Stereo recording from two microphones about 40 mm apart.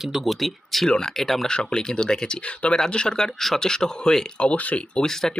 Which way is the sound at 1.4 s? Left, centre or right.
Centre.